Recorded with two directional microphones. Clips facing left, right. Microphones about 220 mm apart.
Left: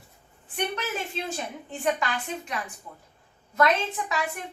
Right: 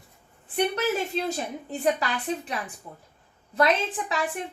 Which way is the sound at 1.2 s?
40° right (ahead or behind).